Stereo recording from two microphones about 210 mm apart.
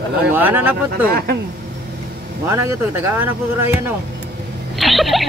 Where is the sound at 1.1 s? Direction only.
45° right (ahead or behind).